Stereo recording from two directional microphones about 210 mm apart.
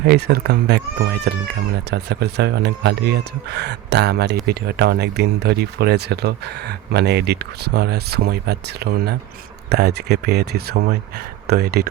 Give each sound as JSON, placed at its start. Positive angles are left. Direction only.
{"t": 0.1, "sound": "speech", "side_deg": -50}
{"t": 1.9, "sound": "speech", "side_deg": -55}